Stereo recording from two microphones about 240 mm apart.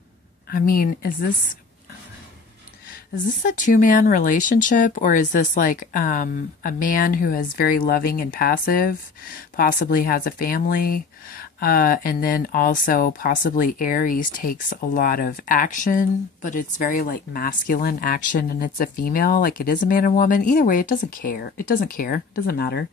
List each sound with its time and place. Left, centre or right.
0.5 s speech: left
3.3 s speech: left